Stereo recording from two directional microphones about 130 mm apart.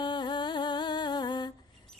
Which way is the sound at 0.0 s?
35° left (ahead or behind).